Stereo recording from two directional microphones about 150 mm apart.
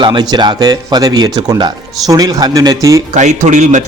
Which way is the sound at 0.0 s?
30° right (ahead or behind).